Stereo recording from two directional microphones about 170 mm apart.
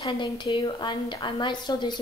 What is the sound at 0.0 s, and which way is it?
A woman's voice, 25° left (ahead or behind).